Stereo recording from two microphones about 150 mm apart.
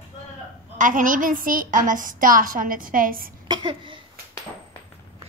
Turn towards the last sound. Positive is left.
turn(degrees=-30)  # may be behind; listen again after turning